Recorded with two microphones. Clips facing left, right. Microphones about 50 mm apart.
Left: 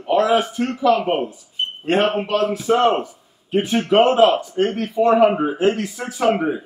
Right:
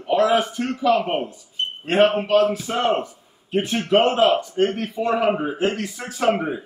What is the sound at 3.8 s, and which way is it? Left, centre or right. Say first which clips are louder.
A man's voice: left 3 dB; centre.